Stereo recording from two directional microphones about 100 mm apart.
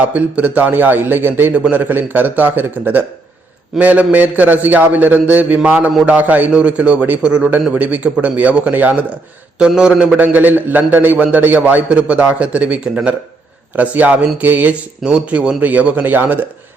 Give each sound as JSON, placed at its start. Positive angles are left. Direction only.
{"t": 0.0, "sound": "a man's voice", "side_deg": -15}
{"t": 10.2, "sound": "a man's voice", "side_deg": -15}